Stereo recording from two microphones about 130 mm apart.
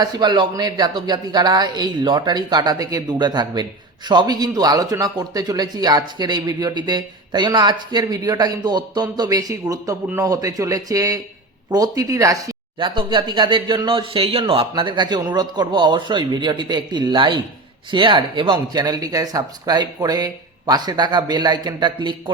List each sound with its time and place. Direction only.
0.0 s a man's voice: 35° right (ahead or behind)
12.8 s a man's voice: 40° right (ahead or behind)